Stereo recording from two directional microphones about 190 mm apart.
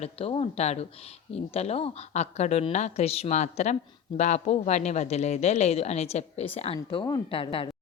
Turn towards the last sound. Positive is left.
turn(degrees=30)  # may be behind; listen again after turning